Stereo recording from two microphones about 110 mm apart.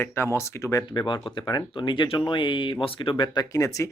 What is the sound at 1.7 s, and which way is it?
Speech, 45° left (ahead or behind).